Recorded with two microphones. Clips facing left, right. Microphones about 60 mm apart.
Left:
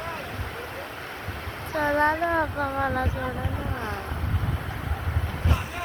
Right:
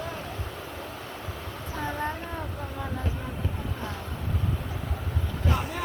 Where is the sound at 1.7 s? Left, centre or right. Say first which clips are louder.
Left 10 dB; left.